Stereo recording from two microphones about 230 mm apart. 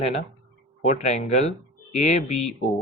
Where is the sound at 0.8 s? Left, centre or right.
Left.